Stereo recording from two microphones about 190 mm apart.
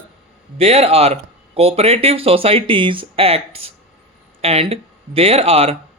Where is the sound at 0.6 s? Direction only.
30° right (ahead or behind).